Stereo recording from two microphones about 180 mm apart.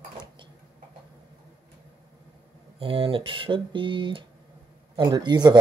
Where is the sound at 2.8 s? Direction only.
30° right (ahead or behind).